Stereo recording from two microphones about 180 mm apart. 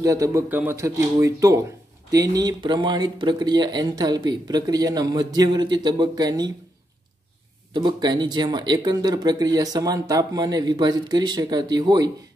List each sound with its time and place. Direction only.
0.0 s speech: 20° right (ahead or behind)
7.7 s speech: 25° right (ahead or behind)